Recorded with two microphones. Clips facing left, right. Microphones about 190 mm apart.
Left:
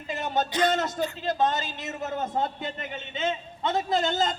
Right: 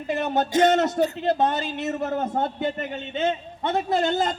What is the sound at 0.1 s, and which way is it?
A man's voice, 65° right (ahead or behind).